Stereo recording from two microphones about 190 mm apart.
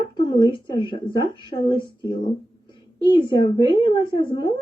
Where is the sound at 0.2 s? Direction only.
25° left (ahead or behind).